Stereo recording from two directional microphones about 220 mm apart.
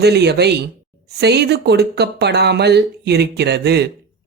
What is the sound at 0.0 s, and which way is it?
A man's voice, 50° right (ahead or behind).